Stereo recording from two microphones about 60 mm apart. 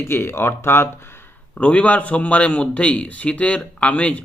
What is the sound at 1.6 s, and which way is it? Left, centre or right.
A man's voice, left.